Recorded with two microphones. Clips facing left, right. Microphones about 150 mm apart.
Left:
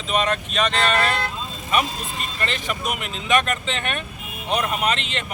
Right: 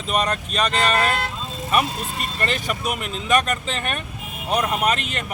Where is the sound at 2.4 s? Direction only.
45° right (ahead or behind).